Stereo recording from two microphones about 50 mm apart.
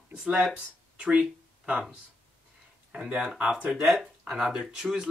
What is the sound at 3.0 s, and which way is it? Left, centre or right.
Speech, right.